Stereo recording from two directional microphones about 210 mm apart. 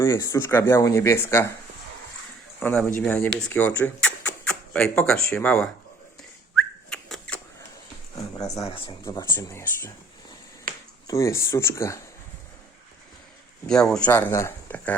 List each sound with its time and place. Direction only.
0.0 s speech: 15° left (ahead or behind)
2.6 s speech: 10° left (ahead or behind)
6.9 s shuffling cards: 5° left (ahead or behind)
8.3 s a sound: 15° left (ahead or behind)
8.6 s speech: 25° left (ahead or behind)
10.7 s finger snapping: 45° right (ahead or behind)
11.0 s speech: 15° left (ahead or behind)
13.7 s speech: 5° left (ahead or behind)